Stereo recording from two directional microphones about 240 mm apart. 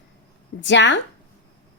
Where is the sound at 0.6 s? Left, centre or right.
Left.